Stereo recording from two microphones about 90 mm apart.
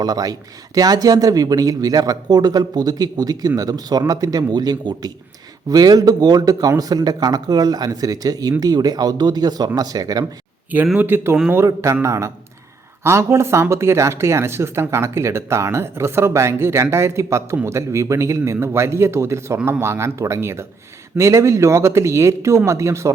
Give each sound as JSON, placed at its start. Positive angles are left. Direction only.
{"t": 0.0, "sound": "speech", "side_deg": -45}
{"t": 10.9, "sound": "speech", "side_deg": -25}